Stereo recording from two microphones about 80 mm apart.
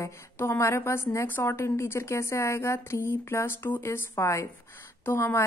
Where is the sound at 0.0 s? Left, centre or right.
Left.